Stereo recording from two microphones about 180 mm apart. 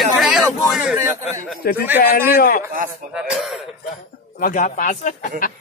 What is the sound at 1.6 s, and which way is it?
Speech, 55° left (ahead or behind).